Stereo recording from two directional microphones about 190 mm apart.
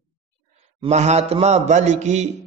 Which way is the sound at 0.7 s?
35° right (ahead or behind).